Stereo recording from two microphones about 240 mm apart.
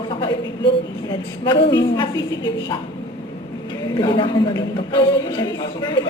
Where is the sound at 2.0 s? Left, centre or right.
Centre.